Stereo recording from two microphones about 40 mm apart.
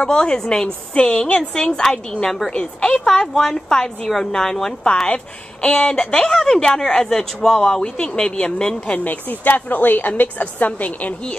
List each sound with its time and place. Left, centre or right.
0.0 s a woman's voice: left
5.0 s a woman's voice: left
5.8 s speech: centre
9.0 s a woman's voice: left